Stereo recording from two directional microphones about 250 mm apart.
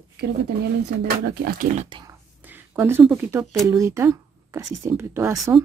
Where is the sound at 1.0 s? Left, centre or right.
Right.